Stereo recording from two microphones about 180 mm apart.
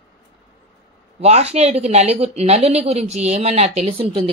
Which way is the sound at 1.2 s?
35° right (ahead or behind).